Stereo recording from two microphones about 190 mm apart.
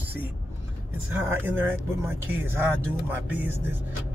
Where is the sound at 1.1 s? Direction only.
10° right (ahead or behind).